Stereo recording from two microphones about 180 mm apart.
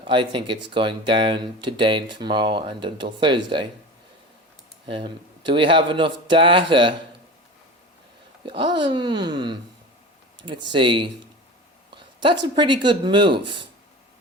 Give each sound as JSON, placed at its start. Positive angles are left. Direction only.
{"t": 0.0, "sound": "speech", "side_deg": -25}
{"t": 4.9, "sound": "speech", "side_deg": -25}
{"t": 8.4, "sound": "speech", "side_deg": -25}
{"t": 12.5, "sound": "speech", "side_deg": -25}